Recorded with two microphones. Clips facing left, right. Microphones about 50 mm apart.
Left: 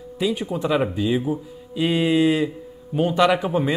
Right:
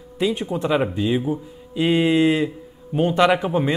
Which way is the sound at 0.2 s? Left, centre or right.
Centre.